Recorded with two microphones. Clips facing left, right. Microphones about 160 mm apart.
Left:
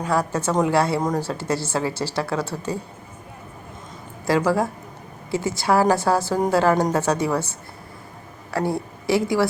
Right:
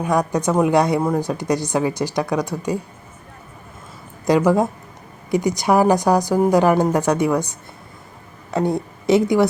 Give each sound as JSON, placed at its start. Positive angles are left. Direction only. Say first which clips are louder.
{"t": 0.0, "sound": "a woman's voice", "louder": "right 3 dB", "side_deg": -15}
{"t": 4.3, "sound": "a woman's voice", "louder": "right 4 dB", "side_deg": -20}